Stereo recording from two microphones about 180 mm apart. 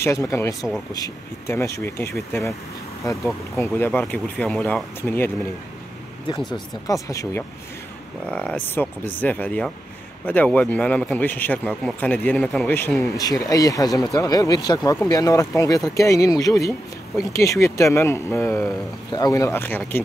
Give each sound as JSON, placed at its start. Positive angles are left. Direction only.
{"t": 0.0, "sound": "a man's voice", "side_deg": 15}
{"t": 3.7, "sound": "a man's voice", "side_deg": 10}
{"t": 6.2, "sound": "speech", "side_deg": 25}
{"t": 8.3, "sound": "a man's voice", "side_deg": 5}